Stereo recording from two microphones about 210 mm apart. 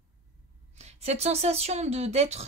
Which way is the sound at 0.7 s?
30° right (ahead or behind).